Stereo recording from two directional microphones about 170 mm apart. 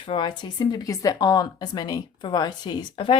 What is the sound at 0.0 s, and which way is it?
Speech, 30° left (ahead or behind).